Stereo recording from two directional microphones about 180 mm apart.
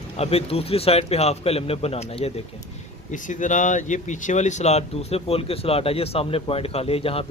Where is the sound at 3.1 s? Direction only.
45° left (ahead or behind).